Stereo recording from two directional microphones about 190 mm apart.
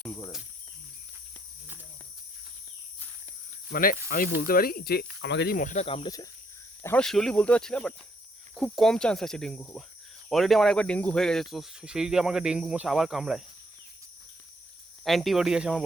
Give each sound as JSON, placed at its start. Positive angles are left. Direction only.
{"t": 3.7, "sound": "speech", "side_deg": 50}
{"t": 5.5, "sound": "speech", "side_deg": 45}
{"t": 5.8, "sound": "speech", "side_deg": 30}
{"t": 6.8, "sound": "speech", "side_deg": 5}
{"t": 15.0, "sound": "speech", "side_deg": 0}